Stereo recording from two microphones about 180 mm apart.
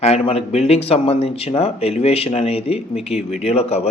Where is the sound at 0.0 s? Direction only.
35° left (ahead or behind).